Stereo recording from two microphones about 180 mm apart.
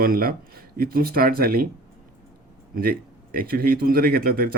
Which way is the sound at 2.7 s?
55° right (ahead or behind).